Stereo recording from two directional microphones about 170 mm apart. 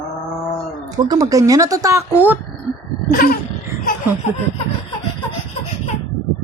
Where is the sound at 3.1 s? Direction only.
60° left (ahead or behind).